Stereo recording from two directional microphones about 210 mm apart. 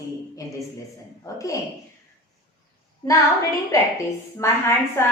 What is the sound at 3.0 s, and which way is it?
Speech, 15° left (ahead or behind).